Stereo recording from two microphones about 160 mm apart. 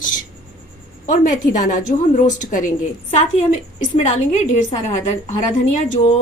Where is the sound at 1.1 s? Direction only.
50° left (ahead or behind).